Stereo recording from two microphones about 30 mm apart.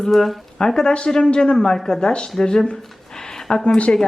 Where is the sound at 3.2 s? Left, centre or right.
Centre.